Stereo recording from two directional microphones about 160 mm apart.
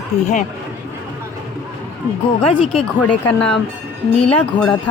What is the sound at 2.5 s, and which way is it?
Speech, 35° left (ahead or behind).